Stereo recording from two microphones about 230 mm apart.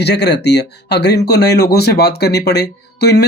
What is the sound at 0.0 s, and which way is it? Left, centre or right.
Speech, left.